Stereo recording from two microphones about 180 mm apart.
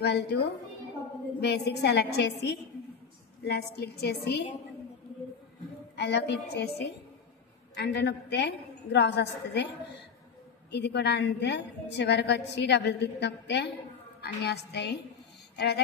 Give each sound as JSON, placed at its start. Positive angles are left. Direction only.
{"t": 0.0, "sound": "a woman's voice", "side_deg": 65}
{"t": 5.9, "sound": "a woman's voice", "side_deg": 70}